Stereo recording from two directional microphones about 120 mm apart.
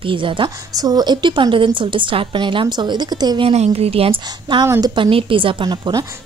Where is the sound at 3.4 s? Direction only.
60° right (ahead or behind).